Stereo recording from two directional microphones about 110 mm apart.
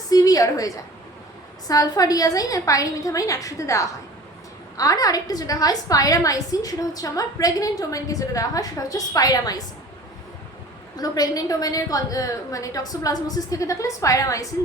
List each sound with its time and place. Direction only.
0.1 s a sound: 35° left (ahead or behind)
1.6 s a woman's voice: 35° left (ahead or behind)
10.9 s a woman's voice: 35° left (ahead or behind)